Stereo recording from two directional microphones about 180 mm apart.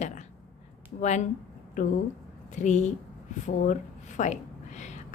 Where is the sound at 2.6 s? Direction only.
40° left (ahead or behind).